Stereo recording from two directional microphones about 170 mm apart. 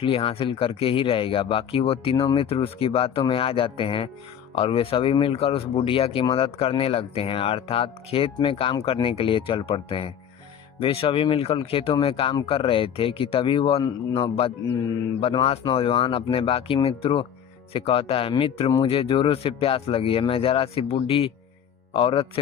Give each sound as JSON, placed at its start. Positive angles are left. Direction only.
{"t": 0.0, "sound": "speech", "side_deg": 35}
{"t": 15.2, "sound": "speech", "side_deg": 30}